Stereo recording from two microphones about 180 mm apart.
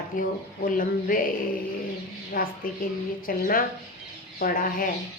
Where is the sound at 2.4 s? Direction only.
50° left (ahead or behind).